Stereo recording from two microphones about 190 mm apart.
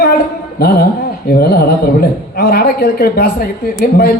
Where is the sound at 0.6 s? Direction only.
55° left (ahead or behind).